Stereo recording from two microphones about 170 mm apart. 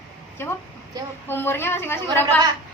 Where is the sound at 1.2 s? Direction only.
15° left (ahead or behind).